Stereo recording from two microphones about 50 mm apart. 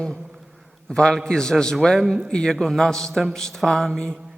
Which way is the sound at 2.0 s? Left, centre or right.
Centre.